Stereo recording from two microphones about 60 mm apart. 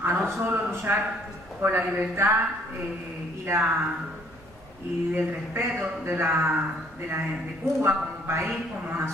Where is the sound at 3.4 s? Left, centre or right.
Right.